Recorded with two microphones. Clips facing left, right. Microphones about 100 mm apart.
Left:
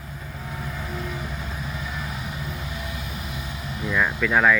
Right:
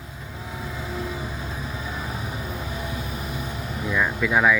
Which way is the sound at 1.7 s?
35° right (ahead or behind).